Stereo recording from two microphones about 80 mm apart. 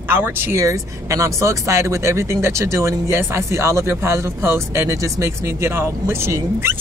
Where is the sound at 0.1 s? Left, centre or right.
Right.